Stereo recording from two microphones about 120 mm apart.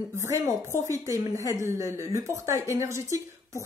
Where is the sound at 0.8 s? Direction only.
25° right (ahead or behind).